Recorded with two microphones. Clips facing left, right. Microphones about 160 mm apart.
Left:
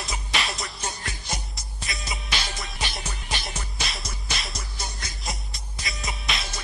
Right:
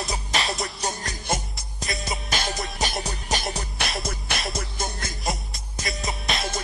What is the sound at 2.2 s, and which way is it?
Music, 45° right (ahead or behind).